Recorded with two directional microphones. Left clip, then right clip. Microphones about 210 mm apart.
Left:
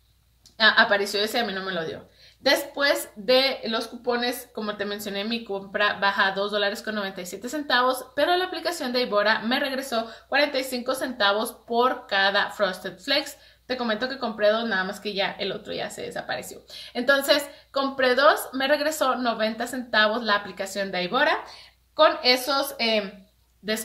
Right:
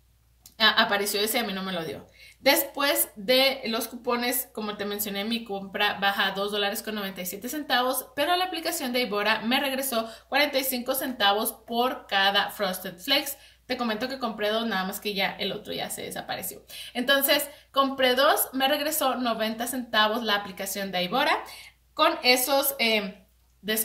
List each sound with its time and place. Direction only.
0.6 s a woman's voice: 20° left (ahead or behind)